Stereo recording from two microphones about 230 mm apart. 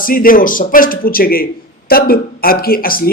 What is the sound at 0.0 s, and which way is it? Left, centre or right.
A man's voice, left.